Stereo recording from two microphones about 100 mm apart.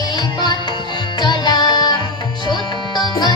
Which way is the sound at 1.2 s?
45° left (ahead or behind).